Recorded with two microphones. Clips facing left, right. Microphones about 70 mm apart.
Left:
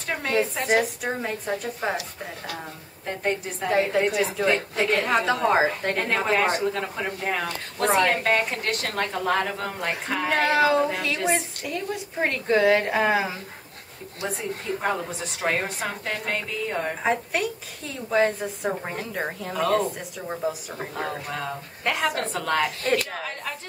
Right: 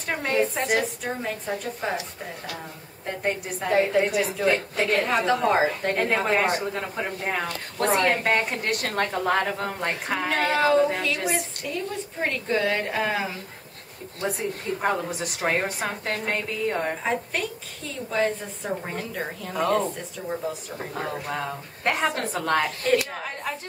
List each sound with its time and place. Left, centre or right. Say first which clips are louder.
0.1 s a woman's voice: right 1 dB; centre
3.1 s a woman's voice: left 1 dB; centre
14.8 s a woman's voice: right 3 dB; centre
17.0 s a woman's voice: left 2 dB; centre
19.5 s a woman's voice: even; centre
21.3 s speech: right 1 dB; centre
22.1 s a woman's voice: right 1 dB; centre